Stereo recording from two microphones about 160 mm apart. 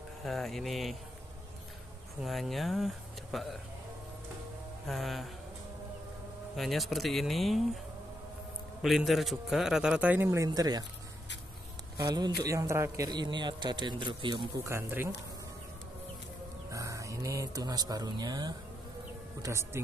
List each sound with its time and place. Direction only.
0.2 s a man's voice: centre (ahead or behind)
2.2 s a man's voice: centre (ahead or behind)
4.8 s a man's voice: centre (ahead or behind)
6.5 s a man's voice: centre (ahead or behind)
8.8 s a man's voice: centre (ahead or behind); by 10.9 s 25° right (ahead or behind)
12.0 s a man's voice: 25° right (ahead or behind)
14.6 s speech: 15° right (ahead or behind)
16.7 s speech: 20° right (ahead or behind)